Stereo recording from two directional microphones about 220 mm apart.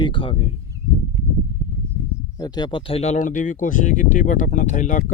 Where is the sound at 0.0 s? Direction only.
20° left (ahead or behind).